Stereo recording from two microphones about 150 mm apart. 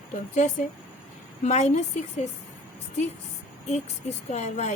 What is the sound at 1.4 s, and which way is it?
Speech, 50° left (ahead or behind).